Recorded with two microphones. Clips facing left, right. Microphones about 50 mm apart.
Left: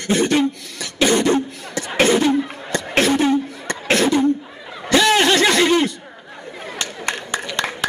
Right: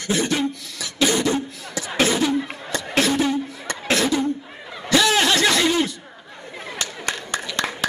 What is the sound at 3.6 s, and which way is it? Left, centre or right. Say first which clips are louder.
Chuckle: left 2 dB; left.